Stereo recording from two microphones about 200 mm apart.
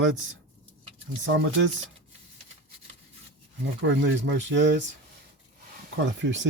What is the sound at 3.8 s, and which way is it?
Speech, 70° right (ahead or behind).